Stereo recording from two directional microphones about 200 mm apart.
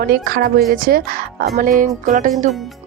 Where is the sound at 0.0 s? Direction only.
50° right (ahead or behind).